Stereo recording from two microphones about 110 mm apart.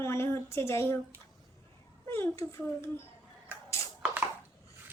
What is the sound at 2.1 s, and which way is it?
Speech, 25° left (ahead or behind).